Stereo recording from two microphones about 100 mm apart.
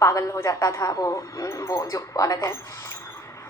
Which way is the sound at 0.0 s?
30° left (ahead or behind).